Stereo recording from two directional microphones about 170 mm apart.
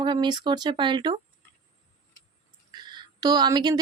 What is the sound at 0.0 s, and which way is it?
Speech, 25° right (ahead or behind).